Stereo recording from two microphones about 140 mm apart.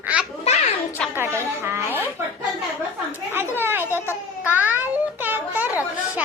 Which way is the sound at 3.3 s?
15° right (ahead or behind).